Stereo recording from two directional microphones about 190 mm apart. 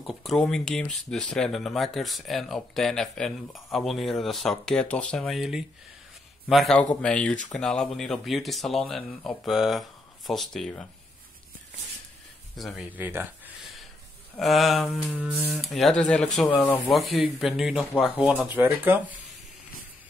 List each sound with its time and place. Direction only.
0.0 s speech: centre (ahead or behind)
12.5 s speech: centre (ahead or behind)
14.3 s speech: centre (ahead or behind)